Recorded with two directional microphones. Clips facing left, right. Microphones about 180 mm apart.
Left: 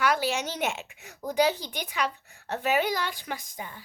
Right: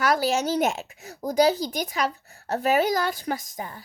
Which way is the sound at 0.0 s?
40° right (ahead or behind).